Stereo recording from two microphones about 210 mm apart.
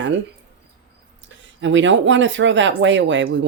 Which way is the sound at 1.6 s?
60° right (ahead or behind).